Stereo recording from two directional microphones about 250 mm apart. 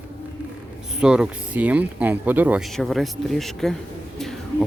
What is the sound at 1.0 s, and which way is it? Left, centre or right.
Speech, centre.